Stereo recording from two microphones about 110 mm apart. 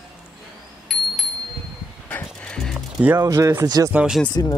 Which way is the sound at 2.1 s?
10° left (ahead or behind).